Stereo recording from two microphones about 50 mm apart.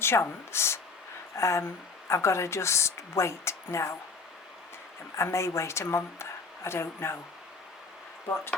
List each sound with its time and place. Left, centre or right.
0.0 s speech: left
1.4 s a woman's voice: left
5.1 s speech: left